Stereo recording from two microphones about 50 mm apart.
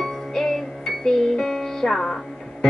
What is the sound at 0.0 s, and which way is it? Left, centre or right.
Music, centre.